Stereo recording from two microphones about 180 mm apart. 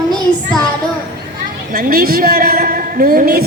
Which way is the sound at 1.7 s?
55° right (ahead or behind).